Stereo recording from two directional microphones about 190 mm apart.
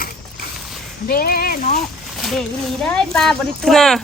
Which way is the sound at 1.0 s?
50° left (ahead or behind).